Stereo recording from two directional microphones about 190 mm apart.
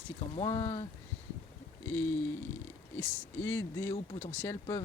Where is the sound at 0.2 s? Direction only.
25° left (ahead or behind).